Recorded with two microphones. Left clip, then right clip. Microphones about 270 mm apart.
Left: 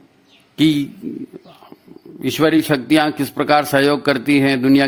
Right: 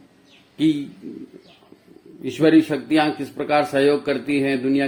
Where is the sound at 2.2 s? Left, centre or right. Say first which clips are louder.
Left 1 dB; left.